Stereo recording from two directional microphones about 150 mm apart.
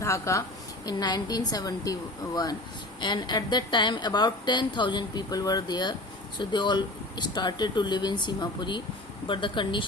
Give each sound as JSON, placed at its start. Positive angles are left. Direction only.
{"t": 0.0, "sound": "a woman's voice", "side_deg": 20}